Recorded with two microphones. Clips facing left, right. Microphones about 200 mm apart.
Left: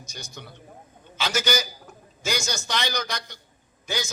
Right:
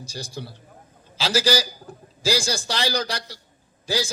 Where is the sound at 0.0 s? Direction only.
30° right (ahead or behind).